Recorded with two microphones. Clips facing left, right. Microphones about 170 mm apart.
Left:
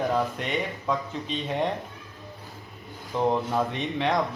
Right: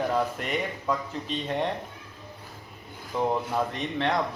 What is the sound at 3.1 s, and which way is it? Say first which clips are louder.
Speech: left 2 dB; centre (ahead or behind).